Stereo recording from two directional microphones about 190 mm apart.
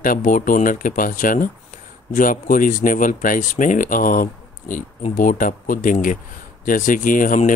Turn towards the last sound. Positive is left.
turn(degrees=45)  # may be behind; listen again after turning